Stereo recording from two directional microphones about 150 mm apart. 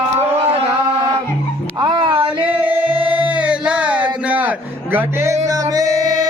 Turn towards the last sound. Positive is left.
turn(degrees=-25)  # may be behind; listen again after turning